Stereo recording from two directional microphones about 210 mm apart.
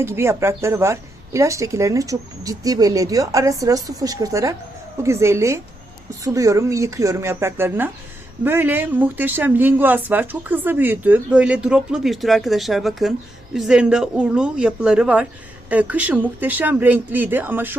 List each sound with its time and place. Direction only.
0.0 s speech: 10° right (ahead or behind)